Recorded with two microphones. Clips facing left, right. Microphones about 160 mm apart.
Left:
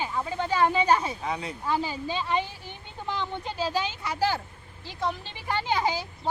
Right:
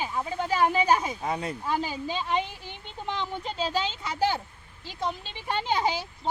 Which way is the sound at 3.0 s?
20° right (ahead or behind).